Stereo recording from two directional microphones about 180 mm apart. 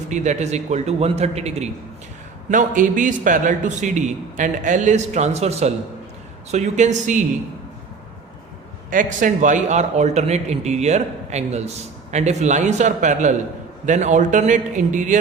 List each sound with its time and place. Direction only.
0.1 s a man's voice: 40° right (ahead or behind)
8.9 s a man's voice: 45° right (ahead or behind)